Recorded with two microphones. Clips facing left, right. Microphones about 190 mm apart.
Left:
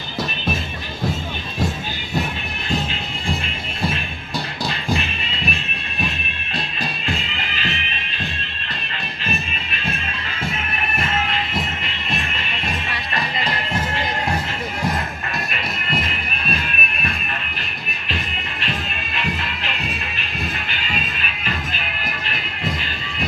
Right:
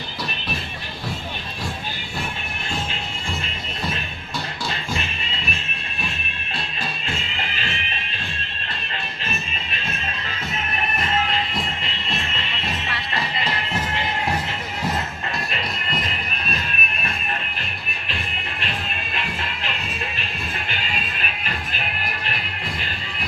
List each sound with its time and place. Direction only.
4.9 s music: 35° right (ahead or behind)
7.1 s music: 35° right (ahead or behind)
10.8 s music: 30° right (ahead or behind)
16.0 s music: 35° right (ahead or behind)
19.2 s music: 40° right (ahead or behind)